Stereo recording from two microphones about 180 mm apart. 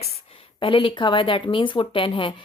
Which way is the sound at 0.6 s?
30° left (ahead or behind).